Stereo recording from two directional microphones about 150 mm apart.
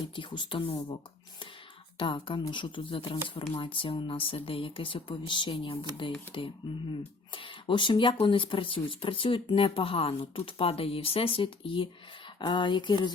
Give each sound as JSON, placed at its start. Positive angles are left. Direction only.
{"t": 0.2, "sound": "speech", "side_deg": 30}
{"t": 2.0, "sound": "speech", "side_deg": 35}